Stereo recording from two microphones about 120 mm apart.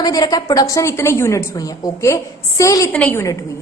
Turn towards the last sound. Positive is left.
turn(degrees=10)  # may be behind; listen again after turning